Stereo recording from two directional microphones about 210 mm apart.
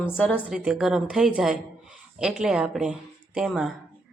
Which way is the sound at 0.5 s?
5° right (ahead or behind).